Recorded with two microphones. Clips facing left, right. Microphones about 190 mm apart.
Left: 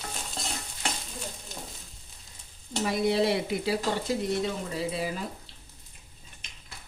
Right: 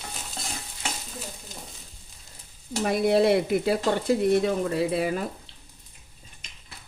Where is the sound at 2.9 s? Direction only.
55° right (ahead or behind).